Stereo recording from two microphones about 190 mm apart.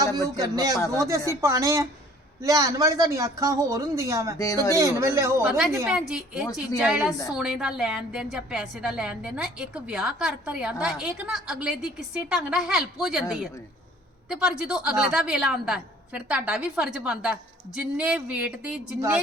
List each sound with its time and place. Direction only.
0.3 s speech: 20° right (ahead or behind)
4.4 s speech: 20° left (ahead or behind)
4.8 s speech: 15° right (ahead or behind)
6.1 s a woman's voice: centre (ahead or behind)
7.1 s speech: 15° left (ahead or behind)
7.3 s a woman's voice: 5° right (ahead or behind)
14.3 s a woman's voice: 5° right (ahead or behind)